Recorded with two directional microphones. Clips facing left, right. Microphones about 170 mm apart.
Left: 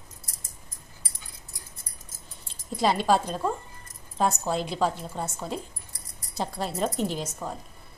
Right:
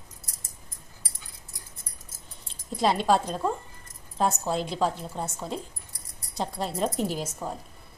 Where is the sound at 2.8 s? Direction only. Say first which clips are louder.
Even; centre (ahead or behind).